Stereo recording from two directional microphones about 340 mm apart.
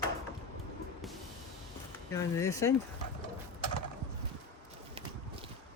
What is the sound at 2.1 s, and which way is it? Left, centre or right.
Speech, centre.